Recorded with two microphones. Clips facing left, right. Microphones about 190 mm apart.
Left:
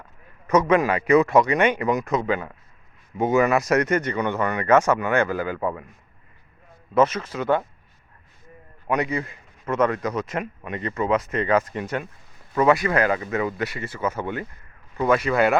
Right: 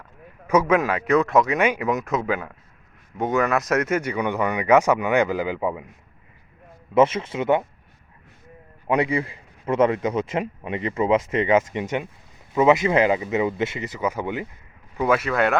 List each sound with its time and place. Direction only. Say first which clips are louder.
0.4 s speech: left 1 dB; 10° right (ahead or behind)
6.9 s a man's voice: right 2 dB; 25° right (ahead or behind)
8.9 s a man's voice: right 3 dB; 30° right (ahead or behind); by 15.5 s centre (ahead or behind)